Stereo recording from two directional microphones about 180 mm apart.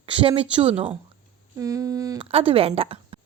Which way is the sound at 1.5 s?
20° right (ahead or behind).